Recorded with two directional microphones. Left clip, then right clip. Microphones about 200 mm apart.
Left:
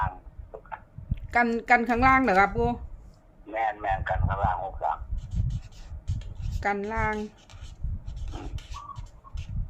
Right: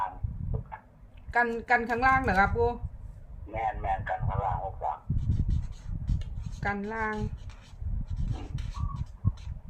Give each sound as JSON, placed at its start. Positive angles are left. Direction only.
{"t": 1.3, "sound": "a woman's voice", "side_deg": 55}
{"t": 3.7, "sound": "speech", "side_deg": 40}
{"t": 6.6, "sound": "a woman's voice", "side_deg": 55}
{"t": 8.3, "sound": "a sound", "side_deg": 20}